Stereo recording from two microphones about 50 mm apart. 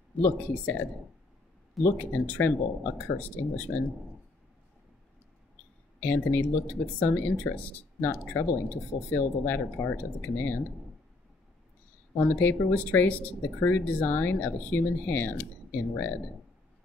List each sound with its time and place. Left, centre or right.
0.2 s speech: left
2.0 s speech: left
5.9 s speech: left
12.4 s speech: left
13.8 s speech: left
14.1 s speech: left